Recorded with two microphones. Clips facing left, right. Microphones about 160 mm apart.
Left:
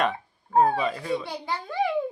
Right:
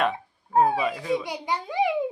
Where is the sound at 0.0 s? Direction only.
5° right (ahead or behind).